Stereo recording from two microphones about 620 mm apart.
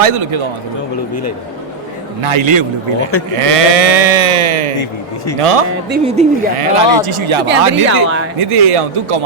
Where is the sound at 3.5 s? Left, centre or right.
Right.